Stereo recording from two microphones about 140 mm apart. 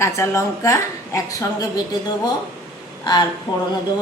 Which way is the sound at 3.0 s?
30° left (ahead or behind).